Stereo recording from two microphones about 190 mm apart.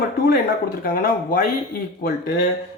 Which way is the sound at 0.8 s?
45° left (ahead or behind).